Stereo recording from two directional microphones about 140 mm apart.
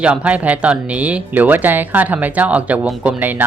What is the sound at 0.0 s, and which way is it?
Speech, 10° right (ahead or behind).